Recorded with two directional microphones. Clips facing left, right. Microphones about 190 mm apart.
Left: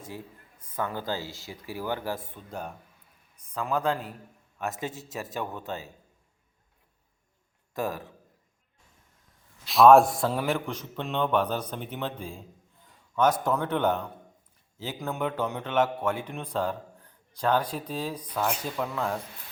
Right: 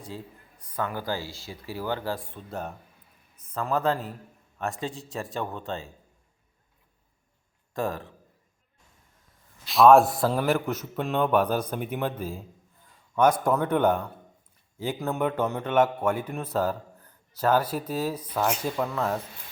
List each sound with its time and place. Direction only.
0.6 s speech: 20° left (ahead or behind)
2.5 s a woman's voice: 5° right (ahead or behind)
4.7 s speech: 20° left (ahead or behind)
5.5 s a woman's voice: 5° left (ahead or behind)
9.6 s speech: centre (ahead or behind)